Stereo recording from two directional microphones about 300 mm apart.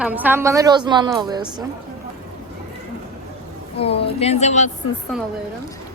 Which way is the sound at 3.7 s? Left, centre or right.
Centre.